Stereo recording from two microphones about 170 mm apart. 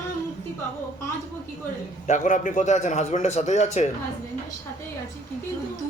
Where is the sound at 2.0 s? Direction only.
45° left (ahead or behind).